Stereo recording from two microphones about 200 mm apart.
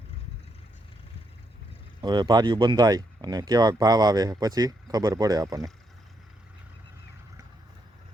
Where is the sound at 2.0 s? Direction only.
20° right (ahead or behind).